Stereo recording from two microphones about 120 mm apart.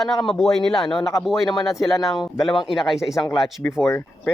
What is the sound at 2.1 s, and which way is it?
Speech, 35° left (ahead or behind).